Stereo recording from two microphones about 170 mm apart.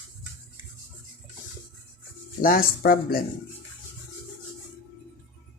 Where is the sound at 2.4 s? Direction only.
60° left (ahead or behind).